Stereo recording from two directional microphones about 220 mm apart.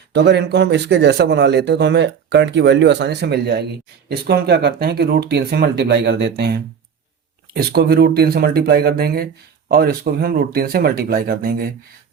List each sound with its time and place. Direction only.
0.1 s speech: 50° right (ahead or behind)